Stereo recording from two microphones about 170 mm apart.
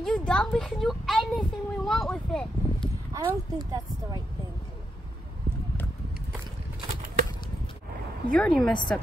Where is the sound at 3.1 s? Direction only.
20° right (ahead or behind).